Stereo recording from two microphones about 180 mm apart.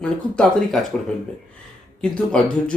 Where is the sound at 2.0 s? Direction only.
5° left (ahead or behind).